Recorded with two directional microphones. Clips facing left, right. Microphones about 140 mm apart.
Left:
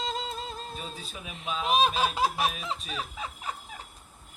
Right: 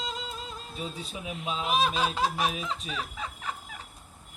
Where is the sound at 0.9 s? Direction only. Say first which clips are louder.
Right 5 dB; 25° right (ahead or behind).